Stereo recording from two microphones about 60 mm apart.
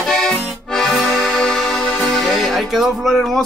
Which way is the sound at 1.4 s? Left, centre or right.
Centre.